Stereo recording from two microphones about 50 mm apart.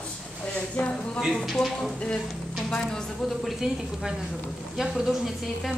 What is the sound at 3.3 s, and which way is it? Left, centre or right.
Speech, centre.